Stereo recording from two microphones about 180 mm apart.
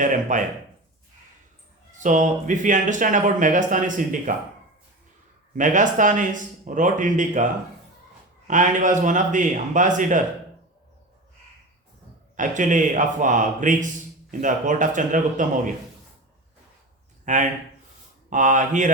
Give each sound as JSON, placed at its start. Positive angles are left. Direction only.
{"t": 0.0, "sound": "speech", "side_deg": -45}
{"t": 2.0, "sound": "speech", "side_deg": -45}
{"t": 5.5, "sound": "speech", "side_deg": -45}
{"t": 8.4, "sound": "speech", "side_deg": -45}
{"t": 12.4, "sound": "speech", "side_deg": -45}
{"t": 17.2, "sound": "speech", "side_deg": -45}